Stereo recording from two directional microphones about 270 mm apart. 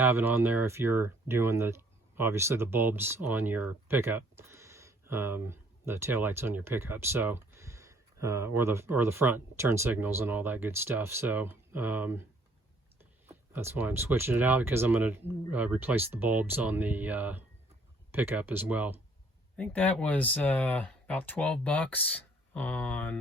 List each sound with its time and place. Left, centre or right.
0.0 s speech: centre
13.2 s speech: centre
19.5 s speech: centre